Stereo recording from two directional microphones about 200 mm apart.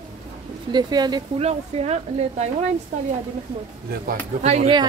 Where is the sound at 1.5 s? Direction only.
30° right (ahead or behind).